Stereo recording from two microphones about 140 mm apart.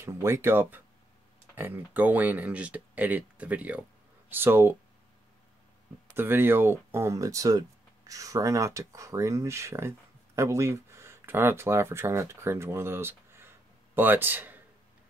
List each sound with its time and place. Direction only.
0.0 s speech: 20° right (ahead or behind)
6.1 s speech: 15° right (ahead or behind)